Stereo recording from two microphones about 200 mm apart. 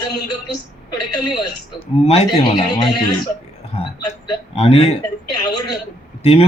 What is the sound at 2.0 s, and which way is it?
Speech, 35° left (ahead or behind).